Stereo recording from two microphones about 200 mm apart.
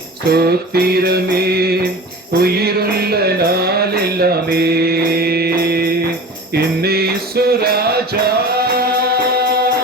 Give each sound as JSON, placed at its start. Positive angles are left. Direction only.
{"t": 0.3, "sound": "mantra", "side_deg": -50}
{"t": 2.4, "sound": "music", "side_deg": -50}